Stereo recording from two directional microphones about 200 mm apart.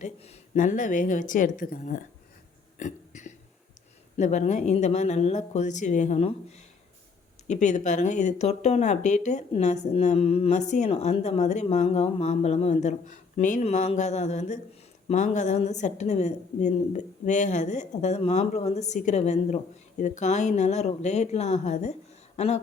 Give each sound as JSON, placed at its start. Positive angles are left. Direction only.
{"t": 0.5, "sound": "speech", "side_deg": 40}
{"t": 2.7, "sound": "a sound", "side_deg": 40}
{"t": 4.2, "sound": "speech", "side_deg": 35}
{"t": 7.4, "sound": "speech", "side_deg": 35}